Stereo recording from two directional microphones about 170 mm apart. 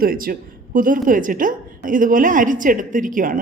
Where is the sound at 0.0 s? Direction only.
60° right (ahead or behind).